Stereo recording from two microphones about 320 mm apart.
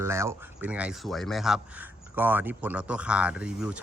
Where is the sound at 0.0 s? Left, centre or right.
Centre.